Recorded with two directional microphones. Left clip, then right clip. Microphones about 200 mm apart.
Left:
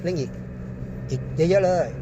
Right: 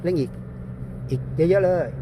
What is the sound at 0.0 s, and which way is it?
Speech, 35° right (ahead or behind).